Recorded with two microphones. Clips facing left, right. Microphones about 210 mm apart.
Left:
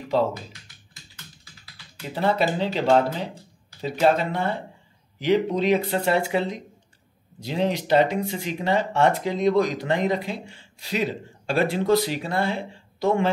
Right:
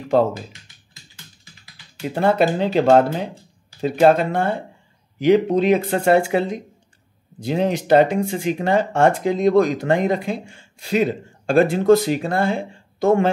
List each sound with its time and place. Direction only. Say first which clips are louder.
2.1 s speech: right 5 dB; 50° right (ahead or behind)